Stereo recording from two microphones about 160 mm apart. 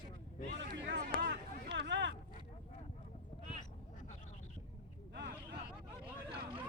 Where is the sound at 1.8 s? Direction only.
90° right.